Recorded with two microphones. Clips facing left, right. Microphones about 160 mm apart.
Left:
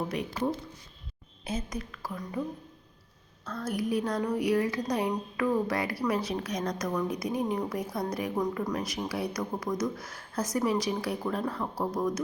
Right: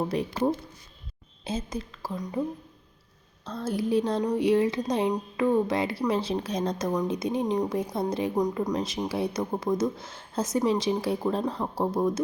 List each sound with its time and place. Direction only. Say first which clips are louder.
0.1 s speech: right 4 dB; 30° right (ahead or behind)
3.4 s speech: right 3 dB; 30° right (ahead or behind)